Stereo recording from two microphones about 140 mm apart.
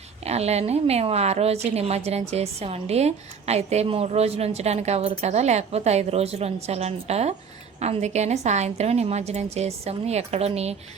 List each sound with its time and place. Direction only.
0.3 s a woman's voice: 50° right (ahead or behind)